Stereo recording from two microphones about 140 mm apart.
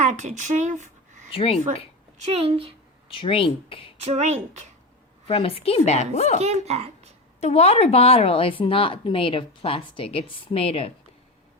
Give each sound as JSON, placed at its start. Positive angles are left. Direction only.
{"t": 0.0, "sound": "speech", "side_deg": -55}
{"t": 1.3, "sound": "a woman's voice", "side_deg": 45}
{"t": 2.1, "sound": "a woman's voice", "side_deg": -50}
{"t": 3.1, "sound": "speech", "side_deg": 40}
{"t": 4.0, "sound": "a woman's voice", "side_deg": -55}
{"t": 5.3, "sound": "a woman's voice", "side_deg": 45}
{"t": 6.4, "sound": "a woman's voice", "side_deg": -50}
{"t": 7.3, "sound": "speech", "side_deg": 50}